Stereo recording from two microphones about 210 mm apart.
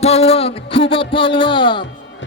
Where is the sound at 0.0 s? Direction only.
30° left (ahead or behind).